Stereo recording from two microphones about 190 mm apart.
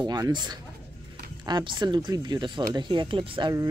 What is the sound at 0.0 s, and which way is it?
Speech, 20° right (ahead or behind).